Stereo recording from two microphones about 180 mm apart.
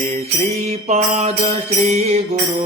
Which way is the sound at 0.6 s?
40° right (ahead or behind).